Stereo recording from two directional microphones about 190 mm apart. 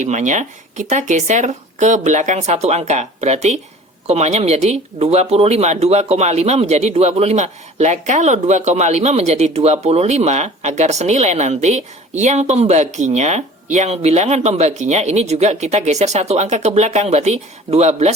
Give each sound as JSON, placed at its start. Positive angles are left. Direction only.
{"t": 0.0, "sound": "speech", "side_deg": -40}